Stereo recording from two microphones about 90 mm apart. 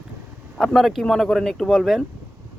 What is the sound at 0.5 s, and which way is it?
Speech, centre (ahead or behind).